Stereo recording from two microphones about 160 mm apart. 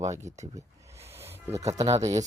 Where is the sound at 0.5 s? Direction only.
15° right (ahead or behind).